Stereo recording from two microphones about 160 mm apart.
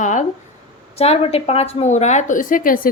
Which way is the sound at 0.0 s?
50° left (ahead or behind).